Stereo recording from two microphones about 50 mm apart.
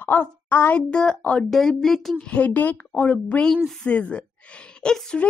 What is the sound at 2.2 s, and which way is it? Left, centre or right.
Speech, left.